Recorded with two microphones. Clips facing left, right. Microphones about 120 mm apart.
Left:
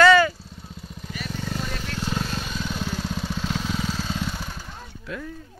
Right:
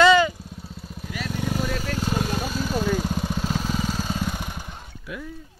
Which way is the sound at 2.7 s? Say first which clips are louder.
Right 9 dB; 45° right (ahead or behind).